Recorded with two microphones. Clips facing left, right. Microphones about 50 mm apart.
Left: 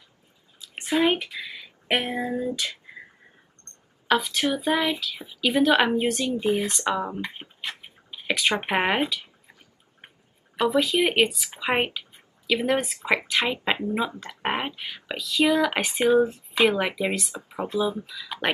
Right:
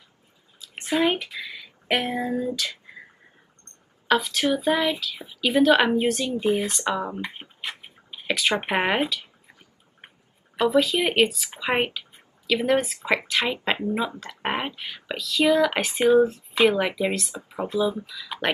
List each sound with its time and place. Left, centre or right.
0.6 s speech: centre
4.1 s speech: centre
7.8 s a sound: centre
10.7 s speech: centre
14.4 s a sound: centre
14.8 s speech: centre